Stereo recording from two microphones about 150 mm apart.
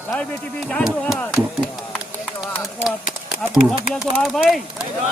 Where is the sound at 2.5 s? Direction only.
15° left (ahead or behind).